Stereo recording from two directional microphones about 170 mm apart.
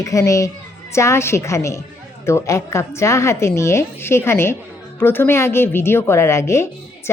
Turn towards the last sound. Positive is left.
turn(degrees=15)  # may be behind; listen again after turning